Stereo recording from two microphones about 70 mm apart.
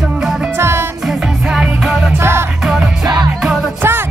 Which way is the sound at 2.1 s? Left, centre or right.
Right.